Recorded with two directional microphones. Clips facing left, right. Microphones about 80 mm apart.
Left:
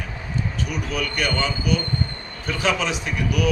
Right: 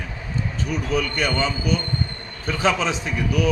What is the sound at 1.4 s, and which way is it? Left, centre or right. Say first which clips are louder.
A man's voice: even; right.